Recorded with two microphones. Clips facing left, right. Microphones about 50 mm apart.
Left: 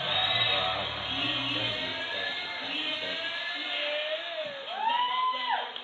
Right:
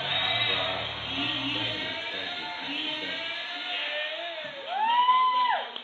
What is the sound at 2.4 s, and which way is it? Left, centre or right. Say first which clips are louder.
Music: right 1 dB; right.